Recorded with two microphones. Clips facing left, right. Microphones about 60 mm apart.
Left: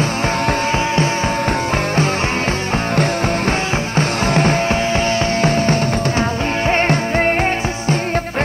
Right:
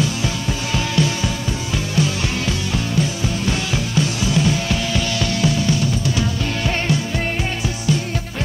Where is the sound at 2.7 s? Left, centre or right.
Left.